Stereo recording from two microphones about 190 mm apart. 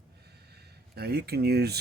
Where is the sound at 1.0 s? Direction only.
55° right (ahead or behind).